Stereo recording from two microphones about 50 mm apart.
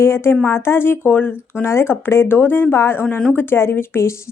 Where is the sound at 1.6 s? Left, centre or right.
Left.